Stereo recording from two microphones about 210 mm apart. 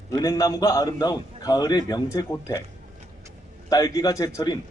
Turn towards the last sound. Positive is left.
turn(degrees=15)  # may be behind; listen again after turning